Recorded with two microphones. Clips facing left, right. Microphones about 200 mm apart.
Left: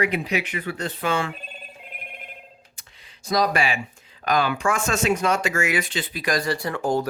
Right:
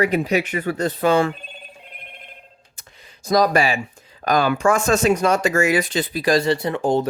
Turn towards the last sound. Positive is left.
turn(degrees=-20)  # may be behind; listen again after turning